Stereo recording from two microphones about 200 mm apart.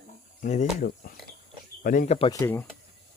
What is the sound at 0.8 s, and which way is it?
Speech, 45° left (ahead or behind).